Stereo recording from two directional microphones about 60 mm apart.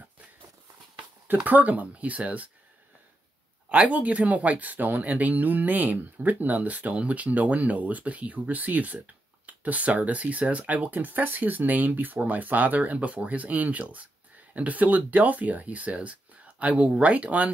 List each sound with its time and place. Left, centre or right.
1.2 s speech: right
3.6 s speech: right